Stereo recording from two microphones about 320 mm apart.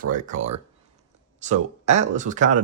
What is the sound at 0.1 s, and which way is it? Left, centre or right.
Speech, right.